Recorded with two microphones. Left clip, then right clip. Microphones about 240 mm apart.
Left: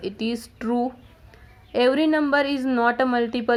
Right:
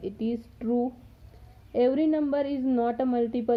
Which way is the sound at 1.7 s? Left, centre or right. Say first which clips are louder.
Left 4 dB; centre.